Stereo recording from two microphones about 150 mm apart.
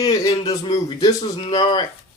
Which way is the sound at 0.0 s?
25° left (ahead or behind).